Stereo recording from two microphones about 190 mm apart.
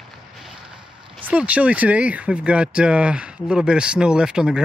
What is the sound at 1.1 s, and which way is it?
Speech, 5° right (ahead or behind).